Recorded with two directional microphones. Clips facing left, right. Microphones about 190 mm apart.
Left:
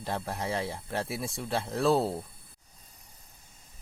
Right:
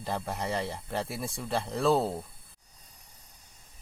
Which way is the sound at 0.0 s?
Centre (ahead or behind).